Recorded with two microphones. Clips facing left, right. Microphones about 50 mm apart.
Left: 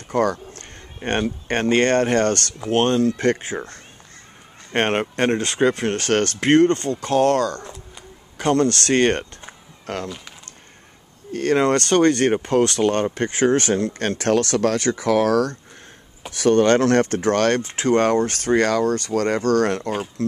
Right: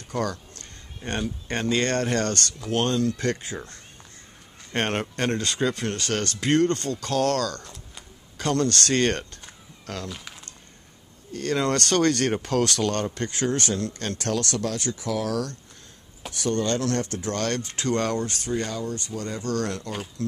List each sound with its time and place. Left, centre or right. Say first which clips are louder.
0.1 s speech: left 8 dB; left
0.6 s a sound: left 6 dB; left
1.5 s speech: left 7 dB; left
10.0 s speech: left 4 dB; centre
11.3 s speech: left 7 dB; left
11.6 s speech: left 4 dB; left
17.6 s speech: left 7 dB; left
18.3 s speech: left 10 dB; left